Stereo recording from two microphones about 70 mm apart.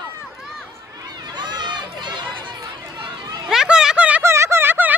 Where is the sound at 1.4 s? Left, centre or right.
Right.